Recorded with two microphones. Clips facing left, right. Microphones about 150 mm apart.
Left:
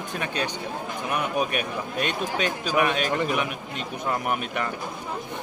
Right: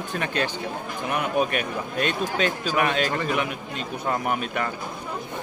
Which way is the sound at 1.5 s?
15° left (ahead or behind).